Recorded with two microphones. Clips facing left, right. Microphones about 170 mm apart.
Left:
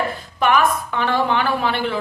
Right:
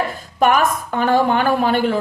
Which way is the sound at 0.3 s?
45° right (ahead or behind).